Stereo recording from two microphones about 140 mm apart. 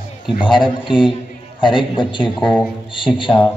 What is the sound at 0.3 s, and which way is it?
A man's voice, 35° left (ahead or behind).